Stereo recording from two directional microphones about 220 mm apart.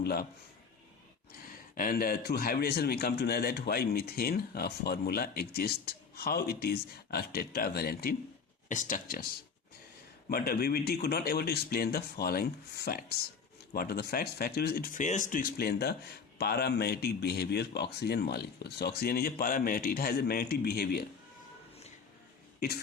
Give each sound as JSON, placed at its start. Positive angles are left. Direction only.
{"t": 0.0, "sound": "speech", "side_deg": 45}
{"t": 1.7, "sound": "a man's voice", "side_deg": 40}
{"t": 10.2, "sound": "a man's voice", "side_deg": 45}